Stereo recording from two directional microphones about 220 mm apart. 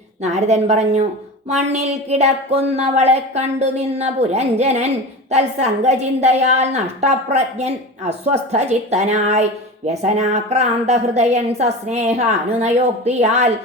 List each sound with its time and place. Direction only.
0.2 s speech: 30° right (ahead or behind)